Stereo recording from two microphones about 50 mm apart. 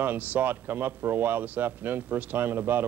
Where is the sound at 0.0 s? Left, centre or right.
Right.